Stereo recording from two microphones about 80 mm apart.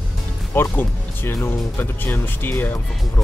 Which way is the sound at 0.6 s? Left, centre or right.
Left.